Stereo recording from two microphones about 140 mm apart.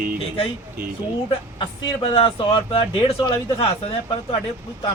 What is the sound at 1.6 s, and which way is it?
Speech, 40° left (ahead or behind).